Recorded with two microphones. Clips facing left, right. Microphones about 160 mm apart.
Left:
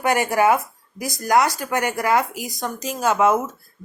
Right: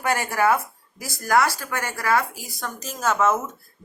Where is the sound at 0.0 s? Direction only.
15° left (ahead or behind).